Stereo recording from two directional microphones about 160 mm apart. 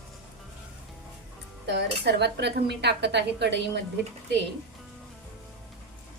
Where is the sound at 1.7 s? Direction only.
90° right.